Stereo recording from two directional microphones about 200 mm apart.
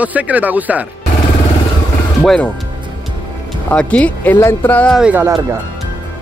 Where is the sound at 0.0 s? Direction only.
5° right (ahead or behind).